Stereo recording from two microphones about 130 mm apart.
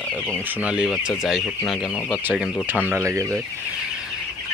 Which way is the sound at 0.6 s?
10° right (ahead or behind).